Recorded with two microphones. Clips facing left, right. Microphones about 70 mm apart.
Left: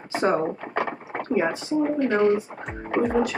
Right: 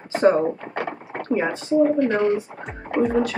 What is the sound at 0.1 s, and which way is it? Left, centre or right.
Speech, centre.